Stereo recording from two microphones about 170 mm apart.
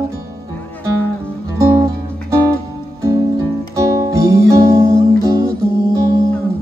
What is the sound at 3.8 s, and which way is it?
Music, 20° right (ahead or behind).